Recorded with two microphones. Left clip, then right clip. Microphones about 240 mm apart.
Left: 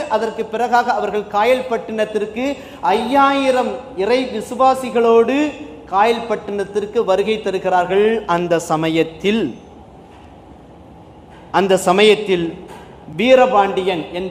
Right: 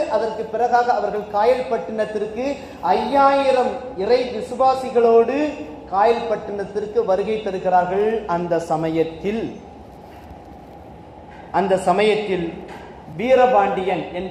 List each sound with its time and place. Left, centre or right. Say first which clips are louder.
0.1 s a man's voice: left 2 dB; left
11.5 s a man's voice: left 4 dB; left